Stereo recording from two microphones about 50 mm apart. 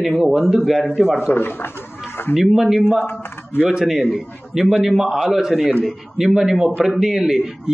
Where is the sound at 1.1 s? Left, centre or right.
Left.